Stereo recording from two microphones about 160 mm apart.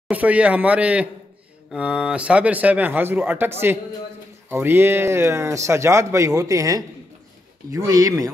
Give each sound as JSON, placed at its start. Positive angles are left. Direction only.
{"t": 0.1, "sound": "speech", "side_deg": -10}